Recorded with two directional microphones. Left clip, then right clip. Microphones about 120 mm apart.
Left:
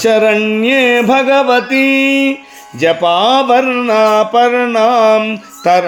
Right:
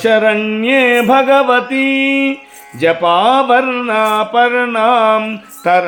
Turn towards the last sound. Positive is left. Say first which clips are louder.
# left 1 dB
turn(degrees=35)  # may be behind; listen again after turning